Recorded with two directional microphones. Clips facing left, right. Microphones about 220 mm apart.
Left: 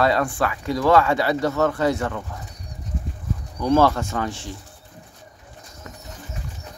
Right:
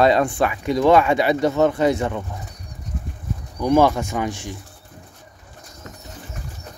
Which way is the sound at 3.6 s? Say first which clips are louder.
Right 2 dB; 15° right (ahead or behind).